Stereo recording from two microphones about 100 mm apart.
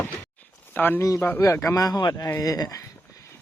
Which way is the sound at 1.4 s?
30° left (ahead or behind).